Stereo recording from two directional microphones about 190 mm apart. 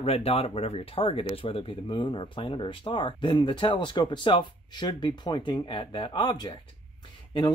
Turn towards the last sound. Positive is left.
turn(degrees=20)  # may be behind; listen again after turning